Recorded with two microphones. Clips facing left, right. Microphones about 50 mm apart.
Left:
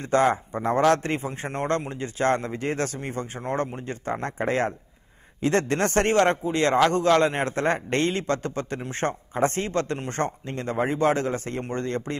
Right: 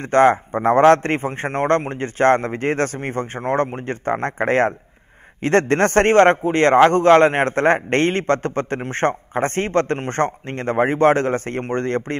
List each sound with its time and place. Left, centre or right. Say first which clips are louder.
0.1 s a man's voice: right 7 dB; right